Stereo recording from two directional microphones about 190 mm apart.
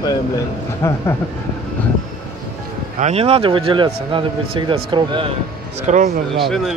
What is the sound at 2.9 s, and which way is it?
Speech, 35° right (ahead or behind).